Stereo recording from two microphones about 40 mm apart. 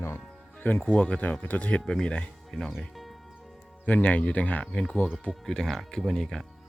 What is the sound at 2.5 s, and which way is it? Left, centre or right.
Speech, centre.